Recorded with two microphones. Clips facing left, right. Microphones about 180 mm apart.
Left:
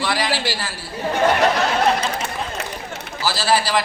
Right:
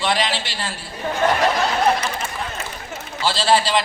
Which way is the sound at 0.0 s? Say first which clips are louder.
Even; 20° right (ahead or behind).